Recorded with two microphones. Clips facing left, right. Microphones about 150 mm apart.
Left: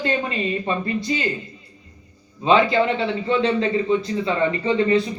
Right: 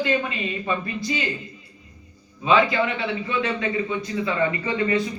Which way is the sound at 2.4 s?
30° left (ahead or behind).